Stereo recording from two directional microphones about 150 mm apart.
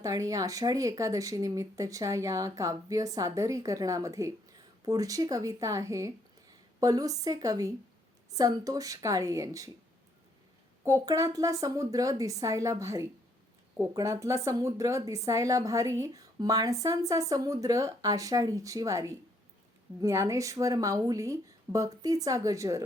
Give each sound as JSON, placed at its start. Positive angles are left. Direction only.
{"t": 0.0, "sound": "speech", "side_deg": -20}
{"t": 10.8, "sound": "speech", "side_deg": -20}